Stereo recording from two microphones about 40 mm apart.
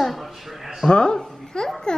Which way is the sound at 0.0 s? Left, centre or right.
Centre.